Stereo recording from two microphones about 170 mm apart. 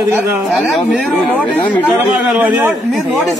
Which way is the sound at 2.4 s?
10° right (ahead or behind).